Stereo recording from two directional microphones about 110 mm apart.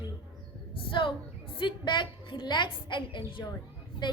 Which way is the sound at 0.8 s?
50° left (ahead or behind).